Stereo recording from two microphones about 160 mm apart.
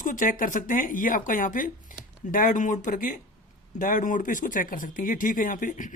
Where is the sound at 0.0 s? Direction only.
55° left (ahead or behind).